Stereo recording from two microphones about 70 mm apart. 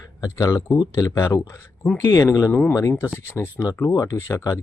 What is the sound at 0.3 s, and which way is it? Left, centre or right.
Speech, left.